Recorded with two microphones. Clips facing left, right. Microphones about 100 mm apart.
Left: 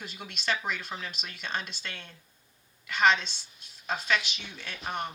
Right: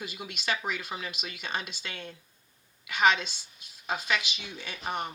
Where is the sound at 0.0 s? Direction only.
10° right (ahead or behind).